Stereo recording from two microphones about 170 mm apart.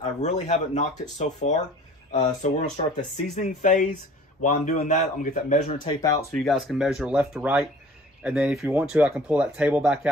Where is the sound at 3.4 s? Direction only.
45° left (ahead or behind).